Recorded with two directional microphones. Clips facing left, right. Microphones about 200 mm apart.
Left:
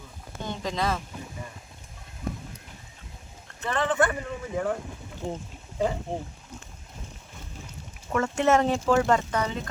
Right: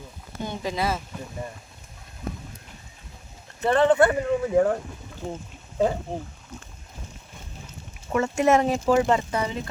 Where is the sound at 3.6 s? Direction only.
35° right (ahead or behind).